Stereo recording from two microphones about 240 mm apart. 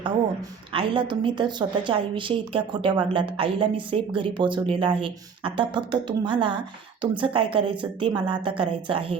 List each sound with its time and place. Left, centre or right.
0.7 s a woman's voice: right